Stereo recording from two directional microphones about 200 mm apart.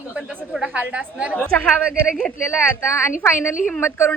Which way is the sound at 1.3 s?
5° left (ahead or behind).